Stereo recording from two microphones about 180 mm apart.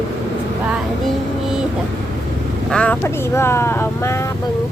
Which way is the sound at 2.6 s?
5° left (ahead or behind).